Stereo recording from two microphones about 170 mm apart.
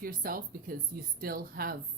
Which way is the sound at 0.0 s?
55° right (ahead or behind).